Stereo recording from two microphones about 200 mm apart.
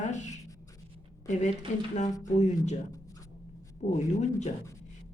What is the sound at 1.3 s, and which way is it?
Speech, 35° left (ahead or behind).